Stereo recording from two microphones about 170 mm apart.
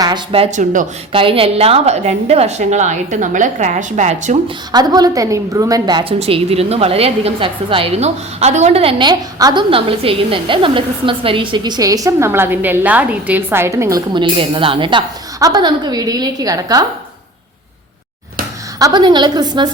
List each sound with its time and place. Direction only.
0.0 s speech: 30° right (ahead or behind); by 0.9 s 50° right (ahead or behind)
1.1 s a woman's voice: 30° right (ahead or behind)
4.4 s a woman's voice: 25° right (ahead or behind)
6.1 s a woman's voice: 35° right (ahead or behind); by 14.0 s 15° right (ahead or behind)
14.1 s a woman's voice: 30° right (ahead or behind)
18.8 s a woman's voice: 25° right (ahead or behind)